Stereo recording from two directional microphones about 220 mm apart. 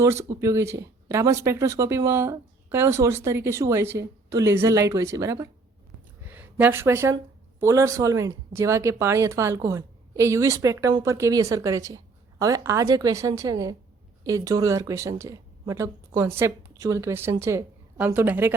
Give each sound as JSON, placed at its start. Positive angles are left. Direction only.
{"t": 0.0, "sound": "a woman's voice", "side_deg": -15}